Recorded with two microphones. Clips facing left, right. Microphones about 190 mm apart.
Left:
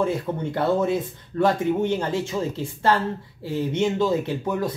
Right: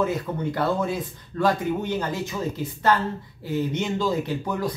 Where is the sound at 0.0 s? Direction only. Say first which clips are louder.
Left 1 dB; 25° left (ahead or behind).